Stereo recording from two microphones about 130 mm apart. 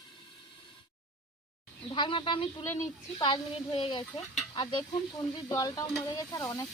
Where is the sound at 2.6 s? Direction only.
20° left (ahead or behind).